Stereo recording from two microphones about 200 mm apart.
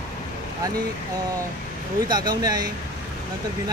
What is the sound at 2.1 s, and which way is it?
Speech, 20° right (ahead or behind).